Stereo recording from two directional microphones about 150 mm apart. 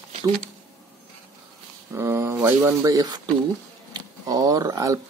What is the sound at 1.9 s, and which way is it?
Speech, 15° right (ahead or behind).